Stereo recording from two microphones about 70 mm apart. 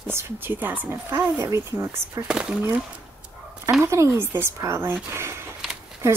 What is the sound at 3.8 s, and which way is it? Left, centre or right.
Speech, right.